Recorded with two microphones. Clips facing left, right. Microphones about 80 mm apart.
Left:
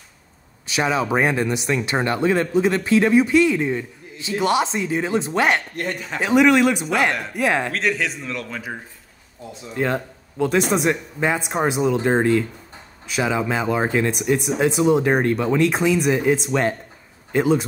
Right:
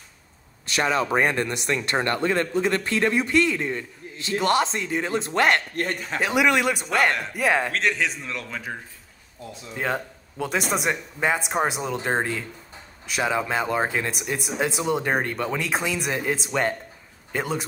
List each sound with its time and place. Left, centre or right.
0.7 s speech: centre
5.8 s speech: right
6.2 s speech: centre
9.8 s speech: centre